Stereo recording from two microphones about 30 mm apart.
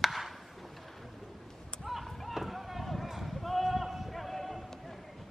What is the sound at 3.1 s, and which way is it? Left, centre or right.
Run, centre.